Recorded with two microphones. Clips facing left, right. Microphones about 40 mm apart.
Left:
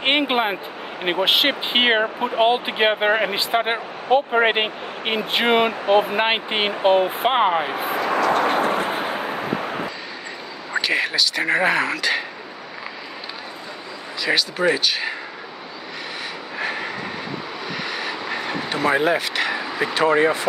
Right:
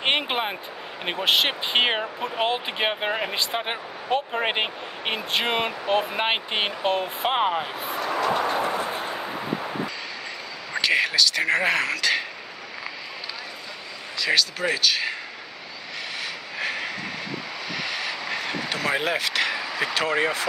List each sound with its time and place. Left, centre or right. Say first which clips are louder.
0.0 s speech: left 5 dB; centre
7.7 s vehicle: left 6 dB; left
8.5 s vehicle: left 5 dB; left
10.7 s speech: left 1 dB; centre
14.2 s speech: left 4 dB; centre
16.5 s train: left 3 dB; centre
17.6 s a sound: left 2 dB; centre